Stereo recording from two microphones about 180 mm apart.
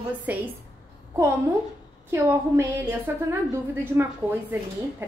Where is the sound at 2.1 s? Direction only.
15° right (ahead or behind).